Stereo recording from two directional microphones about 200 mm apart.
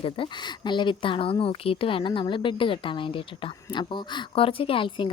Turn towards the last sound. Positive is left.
turn(degrees=25)  # may be behind; listen again after turning